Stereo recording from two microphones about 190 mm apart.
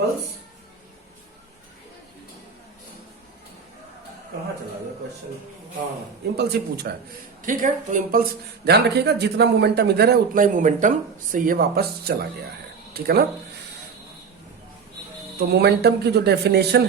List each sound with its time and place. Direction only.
6.3 s speech: 60° right (ahead or behind)
7.4 s speech: 45° right (ahead or behind)
15.4 s speech: 60° right (ahead or behind)